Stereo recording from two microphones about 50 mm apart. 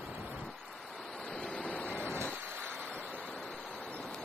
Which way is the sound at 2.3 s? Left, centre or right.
Right.